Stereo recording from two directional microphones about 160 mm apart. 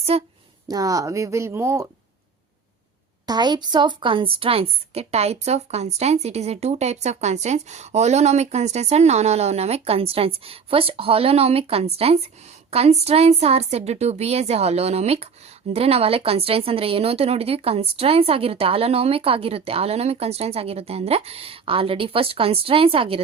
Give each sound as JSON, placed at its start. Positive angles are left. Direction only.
{"t": 0.1, "sound": "a woman's voice", "side_deg": -40}
{"t": 0.7, "sound": "speech", "side_deg": -20}
{"t": 3.2, "sound": "a woman's voice", "side_deg": -25}